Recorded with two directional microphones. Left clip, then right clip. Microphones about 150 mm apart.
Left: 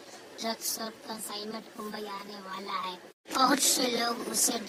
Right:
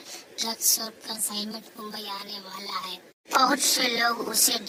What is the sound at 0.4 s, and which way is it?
Speech, 50° right (ahead or behind).